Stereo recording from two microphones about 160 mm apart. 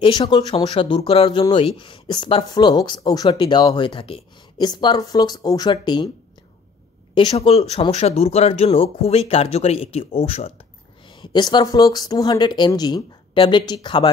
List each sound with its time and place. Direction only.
0.0 s speech: 30° left (ahead or behind)
7.2 s speech: 35° left (ahead or behind)
11.1 s speech: 25° left (ahead or behind)